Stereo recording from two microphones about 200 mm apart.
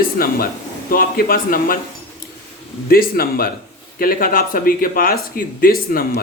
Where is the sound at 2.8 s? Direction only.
50° left (ahead or behind).